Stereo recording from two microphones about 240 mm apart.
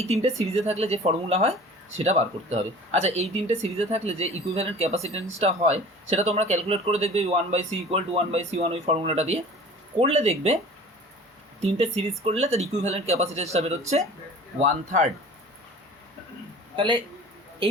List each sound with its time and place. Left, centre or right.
0.0 s speech: right
11.6 s a man's voice: right
16.7 s speech: centre